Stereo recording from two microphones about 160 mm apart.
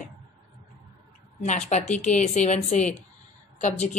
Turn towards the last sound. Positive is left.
turn(degrees=45)  # may be behind; listen again after turning